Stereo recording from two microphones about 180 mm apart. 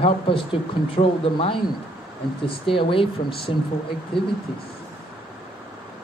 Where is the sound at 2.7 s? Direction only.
30° left (ahead or behind).